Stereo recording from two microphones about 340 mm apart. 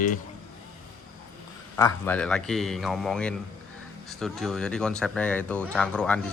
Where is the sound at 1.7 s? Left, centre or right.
Centre.